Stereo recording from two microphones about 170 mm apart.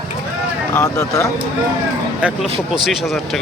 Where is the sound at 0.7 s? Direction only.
20° left (ahead or behind).